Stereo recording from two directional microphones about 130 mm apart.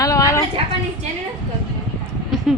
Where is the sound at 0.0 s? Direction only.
25° left (ahead or behind).